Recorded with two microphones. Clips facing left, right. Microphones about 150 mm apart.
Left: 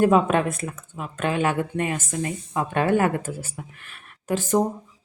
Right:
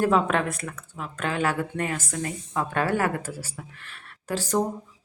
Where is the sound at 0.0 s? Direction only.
20° left (ahead or behind).